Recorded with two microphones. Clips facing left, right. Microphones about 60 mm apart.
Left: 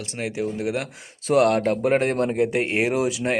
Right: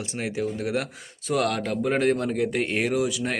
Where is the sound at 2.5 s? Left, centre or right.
Left.